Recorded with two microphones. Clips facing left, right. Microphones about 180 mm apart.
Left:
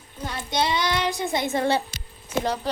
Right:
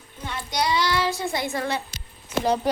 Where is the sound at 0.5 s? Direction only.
25° left (ahead or behind).